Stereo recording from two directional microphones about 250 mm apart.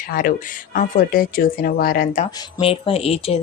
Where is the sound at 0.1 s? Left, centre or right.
Left.